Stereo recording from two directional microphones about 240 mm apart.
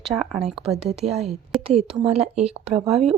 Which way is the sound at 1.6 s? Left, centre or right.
Right.